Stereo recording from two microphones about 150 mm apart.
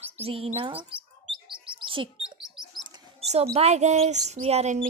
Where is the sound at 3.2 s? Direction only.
45° right (ahead or behind).